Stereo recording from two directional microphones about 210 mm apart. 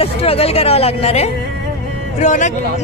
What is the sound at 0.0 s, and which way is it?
Speech, 25° left (ahead or behind).